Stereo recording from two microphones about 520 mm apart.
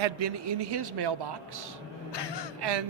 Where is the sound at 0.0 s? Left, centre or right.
Right.